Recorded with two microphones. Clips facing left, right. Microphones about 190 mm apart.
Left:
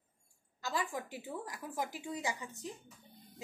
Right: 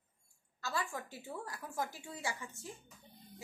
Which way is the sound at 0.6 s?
15° left (ahead or behind).